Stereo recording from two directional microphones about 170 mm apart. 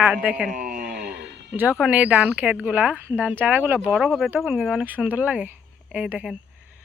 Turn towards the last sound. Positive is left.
turn(degrees=-5)  # may be behind; listen again after turning